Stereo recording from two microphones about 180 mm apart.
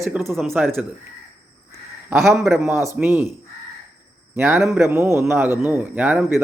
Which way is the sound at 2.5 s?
15° right (ahead or behind).